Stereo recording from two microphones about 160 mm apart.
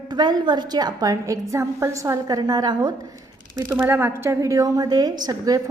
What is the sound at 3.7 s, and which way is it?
A woman's voice, 15° right (ahead or behind).